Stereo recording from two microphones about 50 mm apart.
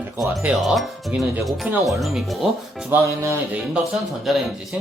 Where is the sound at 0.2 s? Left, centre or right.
Centre.